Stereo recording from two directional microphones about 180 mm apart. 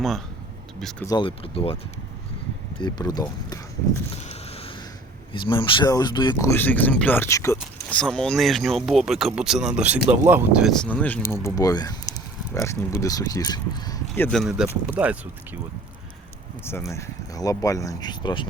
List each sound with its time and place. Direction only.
0.8 s speech: 5° left (ahead or behind)
1.0 s speech: 25° left (ahead or behind)
2.7 s speech: 25° left (ahead or behind)
4.1 s a sound: 35° left (ahead or behind)
5.3 s speech: 25° left (ahead or behind)
14.3 s speech: centre (ahead or behind)
16.6 s speech: 15° left (ahead or behind)